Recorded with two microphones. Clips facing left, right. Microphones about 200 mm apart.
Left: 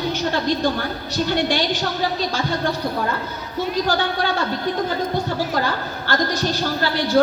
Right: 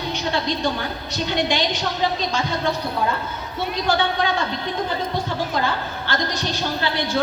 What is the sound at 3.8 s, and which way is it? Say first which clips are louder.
A man's voice: even; 40° left (ahead or behind).